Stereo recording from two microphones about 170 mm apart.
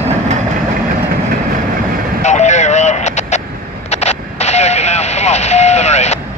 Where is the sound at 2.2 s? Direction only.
45° left (ahead or behind).